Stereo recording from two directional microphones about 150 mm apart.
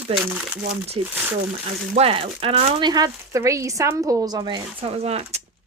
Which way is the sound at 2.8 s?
25° right (ahead or behind).